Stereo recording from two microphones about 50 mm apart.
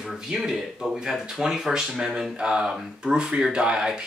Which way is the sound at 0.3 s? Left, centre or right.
Centre.